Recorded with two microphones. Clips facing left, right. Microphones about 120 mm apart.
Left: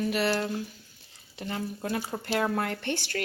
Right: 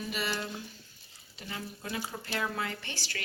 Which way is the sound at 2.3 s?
55° left (ahead or behind).